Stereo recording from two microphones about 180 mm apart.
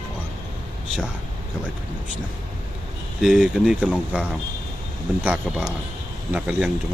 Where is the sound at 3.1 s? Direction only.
5° right (ahead or behind).